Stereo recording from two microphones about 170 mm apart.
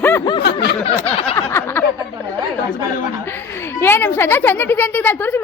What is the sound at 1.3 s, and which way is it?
Speech, 15° left (ahead or behind).